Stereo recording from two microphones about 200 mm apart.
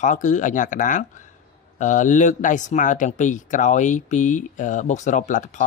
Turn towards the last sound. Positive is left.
turn(degrees=40)  # may be behind; listen again after turning